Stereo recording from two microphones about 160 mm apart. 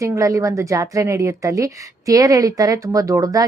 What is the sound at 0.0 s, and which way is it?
A woman's voice, 20° right (ahead or behind).